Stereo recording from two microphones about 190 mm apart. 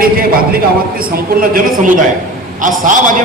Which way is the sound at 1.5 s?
45° right (ahead or behind).